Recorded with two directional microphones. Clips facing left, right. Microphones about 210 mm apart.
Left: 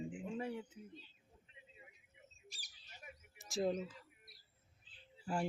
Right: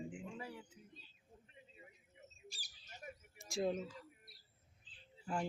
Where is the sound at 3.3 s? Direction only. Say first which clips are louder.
Left 1 dB; centre (ahead or behind).